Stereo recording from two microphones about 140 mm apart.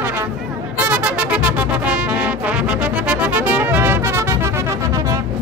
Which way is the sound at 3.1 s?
10° right (ahead or behind).